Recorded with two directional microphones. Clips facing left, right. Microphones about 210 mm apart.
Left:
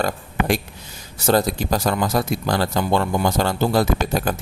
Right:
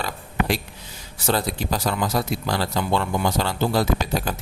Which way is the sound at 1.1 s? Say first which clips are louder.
Left 5 dB; 45° left (ahead or behind).